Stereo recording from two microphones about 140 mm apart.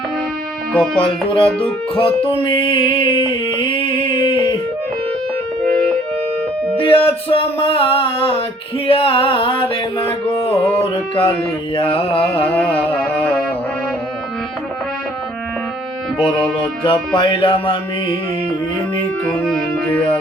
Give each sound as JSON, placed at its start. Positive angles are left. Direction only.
{"t": 0.9, "sound": "music", "side_deg": 40}
{"t": 6.7, "sound": "music", "side_deg": 40}
{"t": 12.7, "sound": "music", "side_deg": 10}
{"t": 16.2, "sound": "music", "side_deg": 40}
{"t": 19.2, "sound": "music", "side_deg": 5}